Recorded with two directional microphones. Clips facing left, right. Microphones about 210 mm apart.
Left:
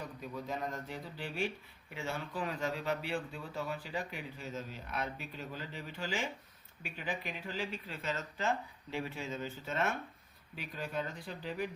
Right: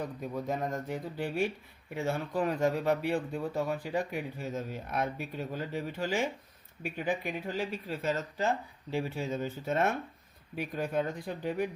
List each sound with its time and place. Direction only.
0.2 s speech: 45° right (ahead or behind)